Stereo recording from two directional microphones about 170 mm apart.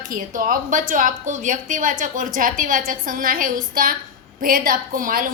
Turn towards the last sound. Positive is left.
turn(degrees=-55)  # may be behind; listen again after turning